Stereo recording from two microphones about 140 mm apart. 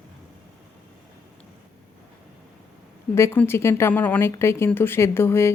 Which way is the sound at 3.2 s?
20° left (ahead or behind).